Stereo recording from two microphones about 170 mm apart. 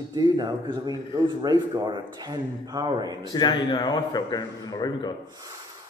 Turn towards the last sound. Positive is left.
turn(degrees=25)  # may be behind; listen again after turning